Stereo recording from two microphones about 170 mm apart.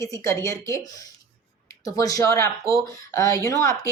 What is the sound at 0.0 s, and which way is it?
Speech, 20° left (ahead or behind).